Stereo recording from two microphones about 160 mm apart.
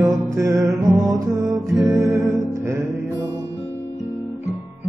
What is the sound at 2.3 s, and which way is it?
Music, 15° right (ahead or behind).